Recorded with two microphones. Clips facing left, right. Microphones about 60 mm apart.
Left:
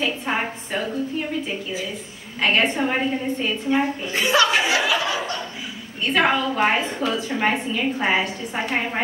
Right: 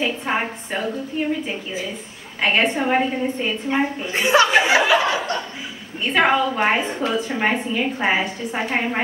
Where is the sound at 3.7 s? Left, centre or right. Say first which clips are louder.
Left 1 dB; right.